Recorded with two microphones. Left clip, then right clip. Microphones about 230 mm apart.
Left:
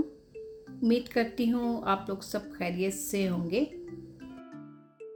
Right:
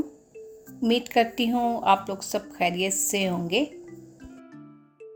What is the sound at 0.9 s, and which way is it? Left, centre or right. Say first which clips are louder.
Speech: right 6 dB; left.